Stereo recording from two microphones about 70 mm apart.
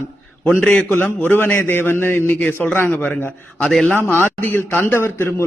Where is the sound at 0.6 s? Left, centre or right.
Left.